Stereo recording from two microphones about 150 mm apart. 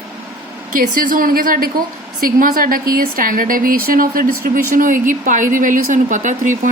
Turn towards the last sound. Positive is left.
turn(degrees=-55)  # may be behind; listen again after turning